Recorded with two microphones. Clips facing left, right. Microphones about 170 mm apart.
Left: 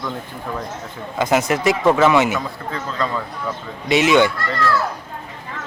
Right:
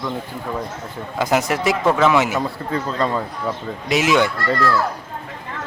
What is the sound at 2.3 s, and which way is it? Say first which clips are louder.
Speech: right 3 dB; 35° right (ahead or behind).